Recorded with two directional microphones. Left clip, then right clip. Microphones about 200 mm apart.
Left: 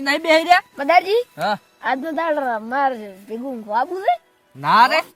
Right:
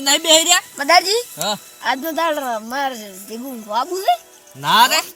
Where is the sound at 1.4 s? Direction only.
5° right (ahead or behind).